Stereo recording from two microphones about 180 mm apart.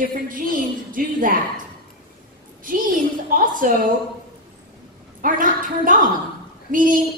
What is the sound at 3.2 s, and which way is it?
Speech, 50° right (ahead or behind).